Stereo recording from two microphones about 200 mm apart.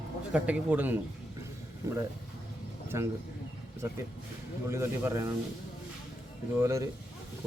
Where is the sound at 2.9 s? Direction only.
15° right (ahead or behind).